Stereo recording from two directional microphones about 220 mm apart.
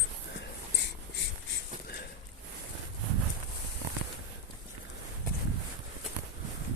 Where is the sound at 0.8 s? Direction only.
50° left (ahead or behind).